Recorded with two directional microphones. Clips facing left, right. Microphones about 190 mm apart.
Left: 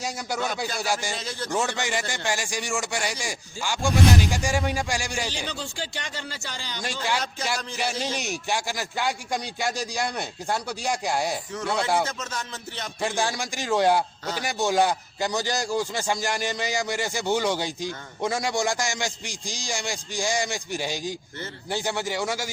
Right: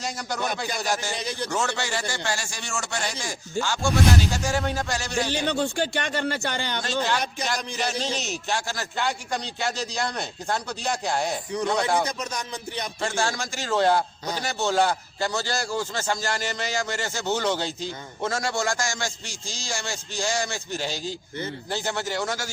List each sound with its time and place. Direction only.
0.0 s a man's voice: 10° left (ahead or behind)
1.1 s music: 15° right (ahead or behind)
1.5 s a man's voice: 15° left (ahead or behind)
5.5 s speech: 60° right (ahead or behind)
6.8 s a man's voice: 10° left (ahead or behind)
11.5 s music: 15° right (ahead or behind)
13.0 s a man's voice: 15° left (ahead or behind)